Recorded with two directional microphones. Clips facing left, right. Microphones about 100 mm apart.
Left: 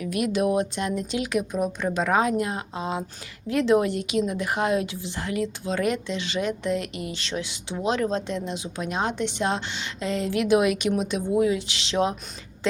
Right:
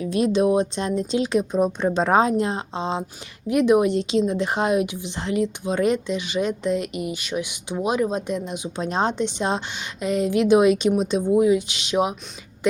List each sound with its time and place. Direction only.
0.0 s a woman's voice: 25° right (ahead or behind)
9.1 s a woman's voice: 20° right (ahead or behind)